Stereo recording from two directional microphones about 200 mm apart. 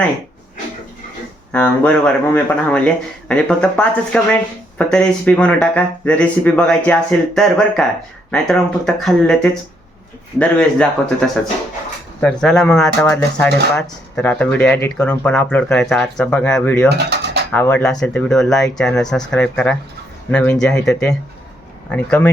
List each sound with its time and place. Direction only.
1.5 s speech: 5° left (ahead or behind)